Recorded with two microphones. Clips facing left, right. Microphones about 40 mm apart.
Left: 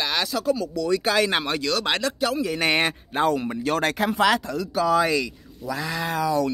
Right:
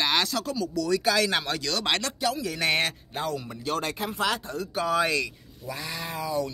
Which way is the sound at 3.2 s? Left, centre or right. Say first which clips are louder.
Left 8 dB; left.